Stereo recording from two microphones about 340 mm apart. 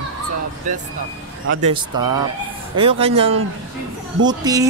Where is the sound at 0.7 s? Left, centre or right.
Right.